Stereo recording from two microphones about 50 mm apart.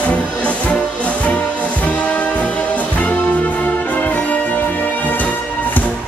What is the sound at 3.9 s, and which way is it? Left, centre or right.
Music, left.